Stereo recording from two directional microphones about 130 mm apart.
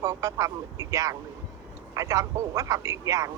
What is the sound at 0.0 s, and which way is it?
Speech, 25° right (ahead or behind).